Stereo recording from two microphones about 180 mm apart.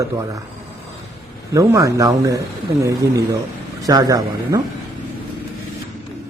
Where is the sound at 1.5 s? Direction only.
15° right (ahead or behind).